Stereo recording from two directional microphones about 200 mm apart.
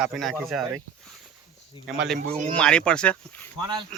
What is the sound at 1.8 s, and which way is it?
Speech, centre (ahead or behind).